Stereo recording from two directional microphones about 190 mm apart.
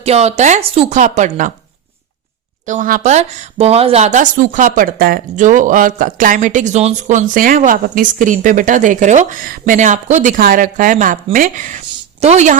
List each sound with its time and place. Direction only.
0.0 s a woman's voice: 35° right (ahead or behind)
2.6 s a woman's voice: 45° right (ahead or behind)